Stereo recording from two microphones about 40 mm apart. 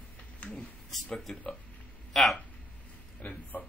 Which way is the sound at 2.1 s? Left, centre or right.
Centre.